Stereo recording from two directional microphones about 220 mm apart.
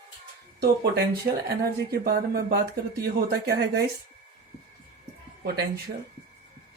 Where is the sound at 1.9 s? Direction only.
45° right (ahead or behind).